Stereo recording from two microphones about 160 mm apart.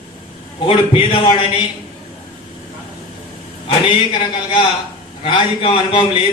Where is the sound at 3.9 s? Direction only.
30° left (ahead or behind).